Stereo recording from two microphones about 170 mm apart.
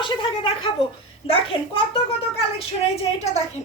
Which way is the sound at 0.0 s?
30° left (ahead or behind).